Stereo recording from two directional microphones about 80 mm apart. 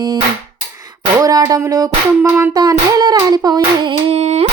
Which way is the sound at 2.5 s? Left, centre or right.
Right.